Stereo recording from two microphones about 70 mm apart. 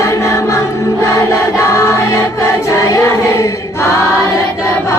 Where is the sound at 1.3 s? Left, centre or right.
Left.